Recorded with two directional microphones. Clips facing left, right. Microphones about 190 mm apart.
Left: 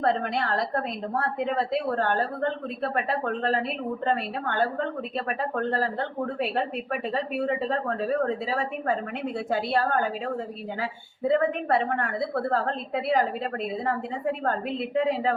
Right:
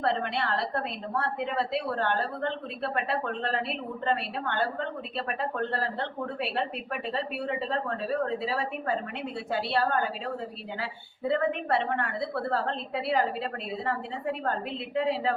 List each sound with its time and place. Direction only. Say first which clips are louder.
0.0 s a woman's voice: left 3 dB; 45° left (ahead or behind)